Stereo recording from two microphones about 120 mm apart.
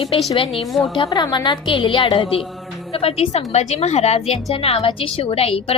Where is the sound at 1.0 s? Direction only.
35° left (ahead or behind).